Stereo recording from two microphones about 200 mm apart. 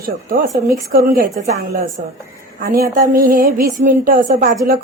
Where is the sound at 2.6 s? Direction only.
50° right (ahead or behind).